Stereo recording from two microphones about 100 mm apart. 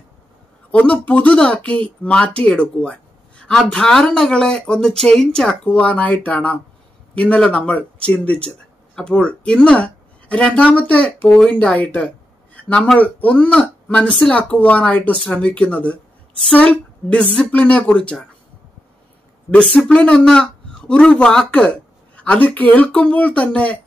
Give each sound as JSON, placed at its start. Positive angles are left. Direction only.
{"t": 0.7, "sound": "speech", "side_deg": 15}
{"t": 19.5, "sound": "speech", "side_deg": 15}